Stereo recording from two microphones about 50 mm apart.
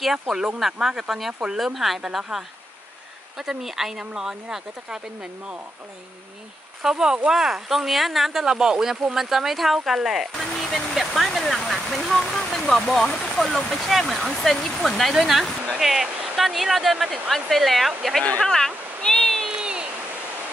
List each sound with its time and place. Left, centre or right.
0.0 s speech: centre
6.8 s speech: centre
18.4 s speech: centre
19.0 s applause: centre
19.5 s a sound: centre